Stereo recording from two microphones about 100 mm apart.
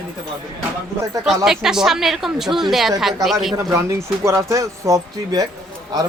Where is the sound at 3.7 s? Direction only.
30° right (ahead or behind).